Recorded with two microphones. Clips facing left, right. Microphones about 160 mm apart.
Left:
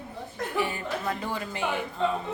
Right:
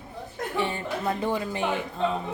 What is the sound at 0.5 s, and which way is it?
Speech, 25° right (ahead or behind).